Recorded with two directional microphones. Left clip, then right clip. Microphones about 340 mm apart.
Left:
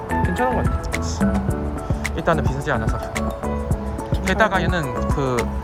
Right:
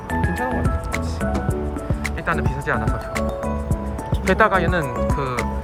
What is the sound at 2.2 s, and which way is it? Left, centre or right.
Speech, centre.